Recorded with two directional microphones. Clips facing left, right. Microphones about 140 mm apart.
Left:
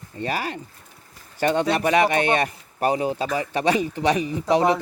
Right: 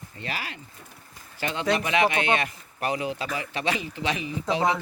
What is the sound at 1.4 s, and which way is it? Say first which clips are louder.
A man's voice: left 6 dB; 50° left (ahead or behind).